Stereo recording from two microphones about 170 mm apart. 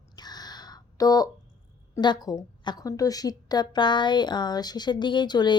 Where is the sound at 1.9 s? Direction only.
25° left (ahead or behind).